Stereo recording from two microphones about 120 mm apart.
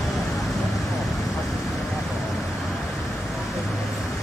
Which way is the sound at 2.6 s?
Centre (ahead or behind).